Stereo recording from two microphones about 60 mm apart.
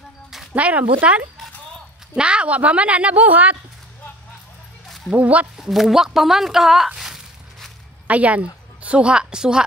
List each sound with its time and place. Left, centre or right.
0.6 s a woman's voice: right
4.8 s a sound: centre
5.1 s a woman's voice: right
5.6 s speech: centre
8.1 s a woman's voice: right